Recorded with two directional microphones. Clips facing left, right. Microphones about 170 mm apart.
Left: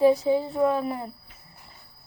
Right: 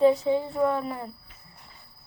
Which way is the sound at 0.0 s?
15° left (ahead or behind).